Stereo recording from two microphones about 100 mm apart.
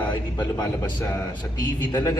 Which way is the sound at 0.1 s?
45° left (ahead or behind).